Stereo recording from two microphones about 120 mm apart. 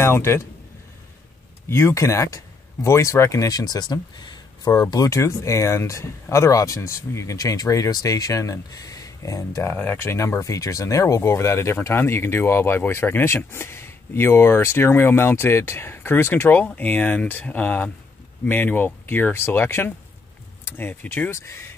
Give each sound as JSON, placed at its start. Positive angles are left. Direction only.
{"t": 0.0, "sound": "a man's voice", "side_deg": 20}
{"t": 1.7, "sound": "speech", "side_deg": 25}
{"t": 4.9, "sound": "speech", "side_deg": 25}
{"t": 21.3, "sound": "speech", "side_deg": 25}